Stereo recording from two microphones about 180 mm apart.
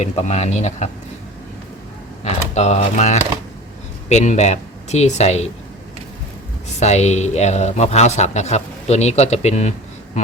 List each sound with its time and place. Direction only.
0.0 s speech: 40° left (ahead or behind)
2.2 s speech: 40° left (ahead or behind)
6.7 s speech: 40° left (ahead or behind)